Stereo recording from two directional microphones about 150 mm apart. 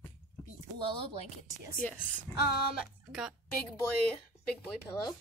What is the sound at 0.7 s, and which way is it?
Speech, 35° right (ahead or behind).